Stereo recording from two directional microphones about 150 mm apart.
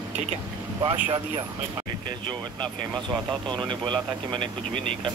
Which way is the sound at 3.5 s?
30° right (ahead or behind).